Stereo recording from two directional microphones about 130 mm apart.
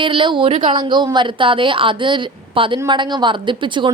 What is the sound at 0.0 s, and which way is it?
A woman's voice, 40° right (ahead or behind).